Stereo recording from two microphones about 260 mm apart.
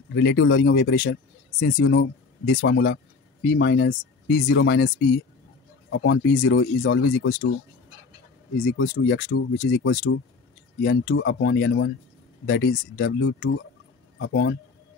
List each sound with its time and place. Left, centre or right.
0.1 s speech: left
8.6 s speech: left